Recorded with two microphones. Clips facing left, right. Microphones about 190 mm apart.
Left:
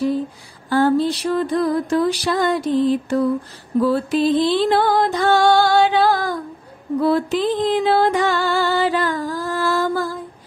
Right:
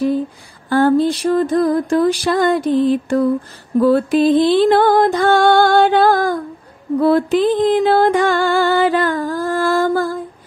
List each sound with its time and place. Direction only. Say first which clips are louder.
0.7 s music: right 3 dB; 55° right (ahead or behind)